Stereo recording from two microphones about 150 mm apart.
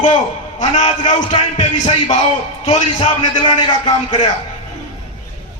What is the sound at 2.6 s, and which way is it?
A man's voice, 30° left (ahead or behind).